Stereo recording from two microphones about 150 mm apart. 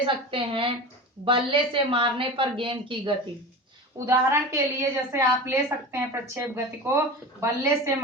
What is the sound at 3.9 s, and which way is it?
A woman's voice, 20° right (ahead or behind).